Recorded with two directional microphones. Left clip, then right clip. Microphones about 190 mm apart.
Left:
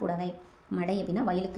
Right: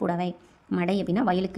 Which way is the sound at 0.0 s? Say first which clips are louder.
Right 4 dB; 30° right (ahead or behind).